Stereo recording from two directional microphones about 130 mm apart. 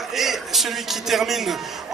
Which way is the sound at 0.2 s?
Centre (ahead or behind).